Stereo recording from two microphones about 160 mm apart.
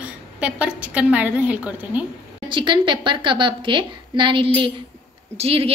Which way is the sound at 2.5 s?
30° right (ahead or behind).